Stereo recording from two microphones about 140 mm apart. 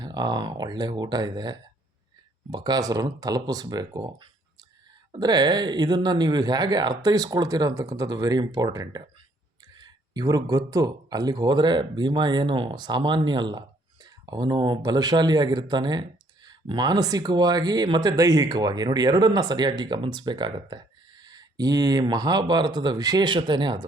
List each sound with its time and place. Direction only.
0.0 s speech: 30° right (ahead or behind)